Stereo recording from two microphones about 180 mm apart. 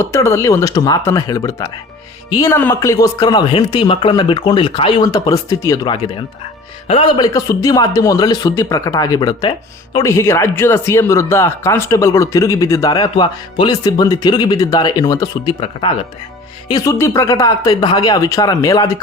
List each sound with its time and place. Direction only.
0.0 s speech: 15° left (ahead or behind)
7.2 s speech: 20° left (ahead or behind)